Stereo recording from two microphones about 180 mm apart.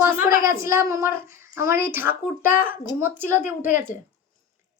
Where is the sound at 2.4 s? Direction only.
50° left (ahead or behind).